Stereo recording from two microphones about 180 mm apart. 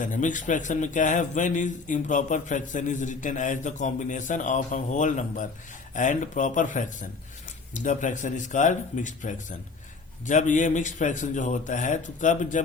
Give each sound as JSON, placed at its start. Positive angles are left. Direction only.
{"t": 0.0, "sound": "a man's voice", "side_deg": 45}